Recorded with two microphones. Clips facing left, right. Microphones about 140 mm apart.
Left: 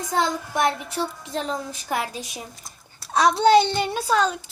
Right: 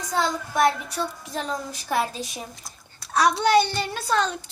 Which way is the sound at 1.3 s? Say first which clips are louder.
Left 2 dB; 25° left (ahead or behind).